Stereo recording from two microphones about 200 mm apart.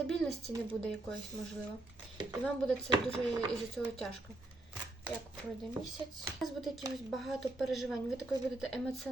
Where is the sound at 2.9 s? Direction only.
25° right (ahead or behind).